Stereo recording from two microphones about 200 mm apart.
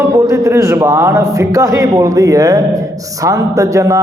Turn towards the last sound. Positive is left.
turn(degrees=-15)  # may be behind; listen again after turning